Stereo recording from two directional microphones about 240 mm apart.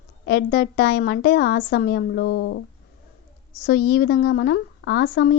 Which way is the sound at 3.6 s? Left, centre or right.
Left.